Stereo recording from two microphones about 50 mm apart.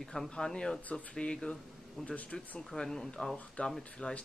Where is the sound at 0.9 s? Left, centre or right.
Left.